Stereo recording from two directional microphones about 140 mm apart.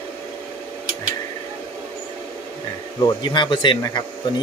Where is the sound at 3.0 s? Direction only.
30° left (ahead or behind).